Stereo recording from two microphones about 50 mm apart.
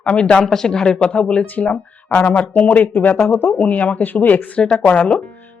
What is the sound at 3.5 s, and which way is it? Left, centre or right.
Speech, left.